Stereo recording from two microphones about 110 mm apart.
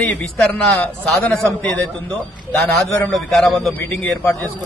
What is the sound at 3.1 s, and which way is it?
Speech, centre (ahead or behind).